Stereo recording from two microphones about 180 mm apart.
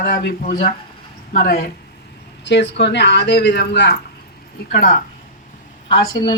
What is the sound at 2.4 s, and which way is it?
Speech, 75° left (ahead or behind).